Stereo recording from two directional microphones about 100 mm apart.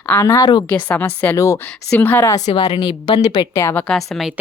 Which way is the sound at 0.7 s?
15° left (ahead or behind).